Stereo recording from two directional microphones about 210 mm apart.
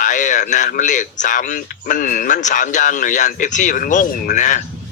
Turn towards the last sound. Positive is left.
turn(degrees=35)  # may be behind; listen again after turning